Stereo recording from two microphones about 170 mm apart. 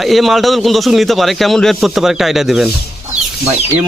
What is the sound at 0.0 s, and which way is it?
A man's voice, centre (ahead or behind).